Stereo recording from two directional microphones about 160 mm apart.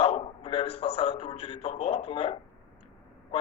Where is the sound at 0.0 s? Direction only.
35° left (ahead or behind).